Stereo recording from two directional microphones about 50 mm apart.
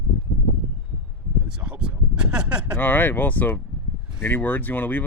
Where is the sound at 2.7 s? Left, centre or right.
Left.